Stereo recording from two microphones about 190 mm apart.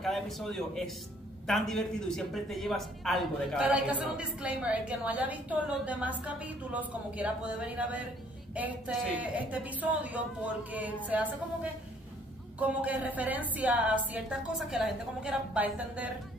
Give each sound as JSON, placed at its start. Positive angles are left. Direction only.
{"t": 0.0, "sound": "a man's voice", "side_deg": 0}
{"t": 12.5, "sound": "a woman's voice", "side_deg": -10}